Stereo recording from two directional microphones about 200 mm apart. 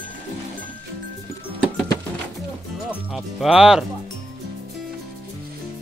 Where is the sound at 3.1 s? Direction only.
Centre (ahead or behind).